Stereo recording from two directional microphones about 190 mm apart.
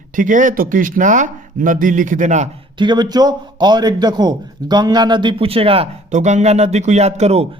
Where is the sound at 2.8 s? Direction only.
25° right (ahead or behind).